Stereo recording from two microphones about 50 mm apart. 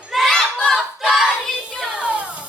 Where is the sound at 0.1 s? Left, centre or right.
Centre.